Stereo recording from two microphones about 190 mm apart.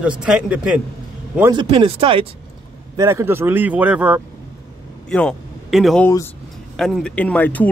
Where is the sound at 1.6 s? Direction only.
30° right (ahead or behind).